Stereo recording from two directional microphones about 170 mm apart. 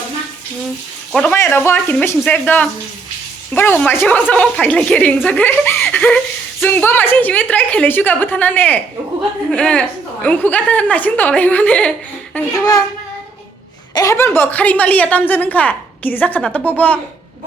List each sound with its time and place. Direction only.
1.1 s a woman's voice: 5° left (ahead or behind)
12.5 s a child's voice: 20° left (ahead or behind)
13.9 s a woman's voice: 20° left (ahead or behind)